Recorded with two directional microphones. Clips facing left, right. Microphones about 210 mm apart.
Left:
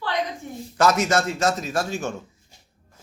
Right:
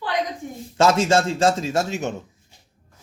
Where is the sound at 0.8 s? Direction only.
25° right (ahead or behind).